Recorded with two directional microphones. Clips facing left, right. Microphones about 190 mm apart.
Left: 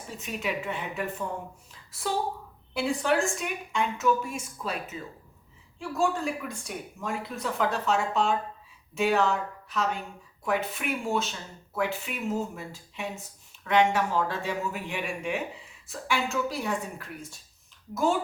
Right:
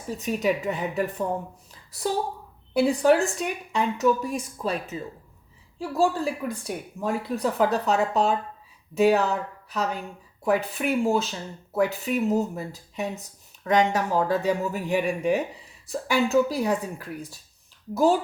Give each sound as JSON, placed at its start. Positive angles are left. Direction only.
{"t": 0.1, "sound": "speech", "side_deg": -40}